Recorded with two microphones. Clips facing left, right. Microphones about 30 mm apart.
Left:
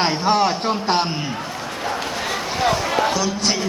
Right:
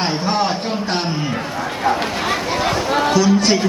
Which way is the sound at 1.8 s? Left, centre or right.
Right.